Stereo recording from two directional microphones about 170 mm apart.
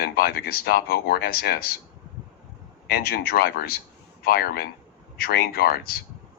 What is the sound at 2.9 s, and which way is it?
Speech, 65° left (ahead or behind).